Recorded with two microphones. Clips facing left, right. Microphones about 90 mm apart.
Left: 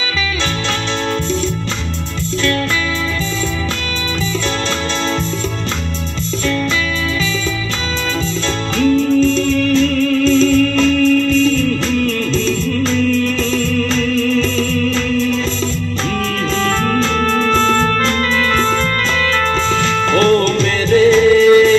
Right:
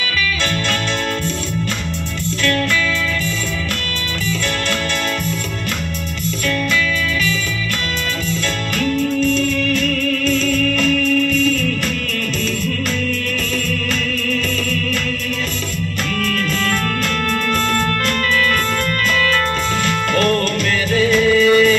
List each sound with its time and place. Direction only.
8.7 s music: 25° left (ahead or behind)
14.2 s music: 25° left (ahead or behind)
17.3 s music: 25° left (ahead or behind)
19.8 s music: 25° left (ahead or behind)